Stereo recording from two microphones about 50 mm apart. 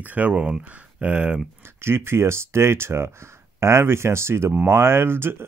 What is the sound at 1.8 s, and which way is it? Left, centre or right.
Speech, right.